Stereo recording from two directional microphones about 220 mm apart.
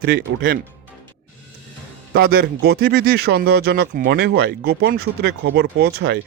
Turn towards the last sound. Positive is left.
turn(degrees=-45)  # may be behind; listen again after turning